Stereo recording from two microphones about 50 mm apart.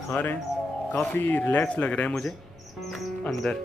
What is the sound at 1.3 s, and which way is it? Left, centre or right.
Speech, left.